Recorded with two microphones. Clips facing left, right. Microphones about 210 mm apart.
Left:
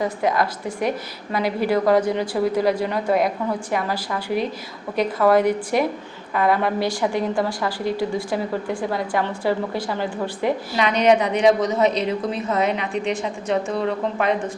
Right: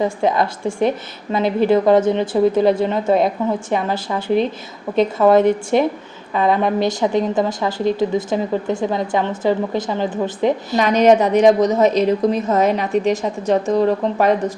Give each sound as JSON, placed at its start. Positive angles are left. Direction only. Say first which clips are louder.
{"t": 0.0, "sound": "a woman's voice", "louder": "right 4 dB", "side_deg": -25}
{"t": 10.8, "sound": "a woman's voice", "louder": "right 5 dB", "side_deg": -45}